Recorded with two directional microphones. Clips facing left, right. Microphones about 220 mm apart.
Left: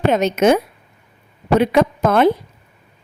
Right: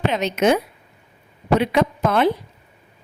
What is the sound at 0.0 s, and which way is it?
A woman's voice, 50° left (ahead or behind).